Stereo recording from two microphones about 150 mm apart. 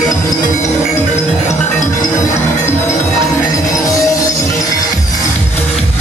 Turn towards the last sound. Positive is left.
turn(degrees=20)  # may be behind; listen again after turning